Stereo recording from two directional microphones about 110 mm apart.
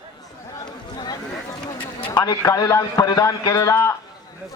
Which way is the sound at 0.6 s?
40° left (ahead or behind).